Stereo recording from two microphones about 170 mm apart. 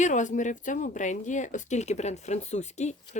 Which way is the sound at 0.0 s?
45° left (ahead or behind).